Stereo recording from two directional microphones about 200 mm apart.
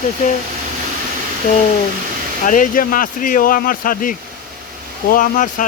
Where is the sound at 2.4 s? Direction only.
40° left (ahead or behind).